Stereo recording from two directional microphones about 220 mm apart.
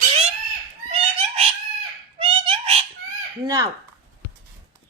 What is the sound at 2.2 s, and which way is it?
Cat, 25° right (ahead or behind).